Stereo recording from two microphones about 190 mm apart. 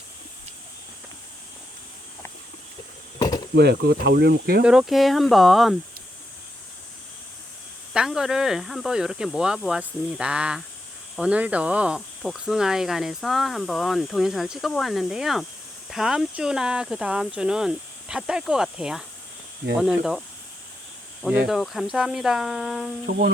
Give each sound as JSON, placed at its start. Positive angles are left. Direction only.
{"t": 3.2, "sound": "cricket", "side_deg": 20}
{"t": 3.5, "sound": "speech", "side_deg": -60}
{"t": 4.6, "sound": "speech", "side_deg": -5}
{"t": 7.9, "sound": "speech", "side_deg": -5}